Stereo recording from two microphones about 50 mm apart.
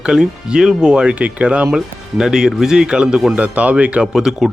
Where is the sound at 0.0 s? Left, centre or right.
Centre.